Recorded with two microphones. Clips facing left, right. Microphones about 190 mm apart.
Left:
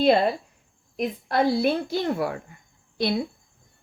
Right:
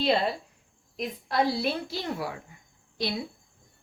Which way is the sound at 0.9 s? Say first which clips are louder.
Left 4 dB; 55° left (ahead or behind).